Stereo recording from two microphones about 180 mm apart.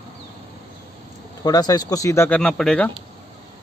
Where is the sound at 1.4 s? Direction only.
20° left (ahead or behind); by 2.9 s 5° left (ahead or behind).